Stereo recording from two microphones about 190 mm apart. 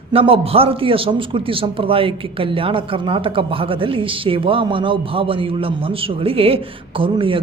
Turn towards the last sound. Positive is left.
turn(degrees=-25)  # may be behind; listen again after turning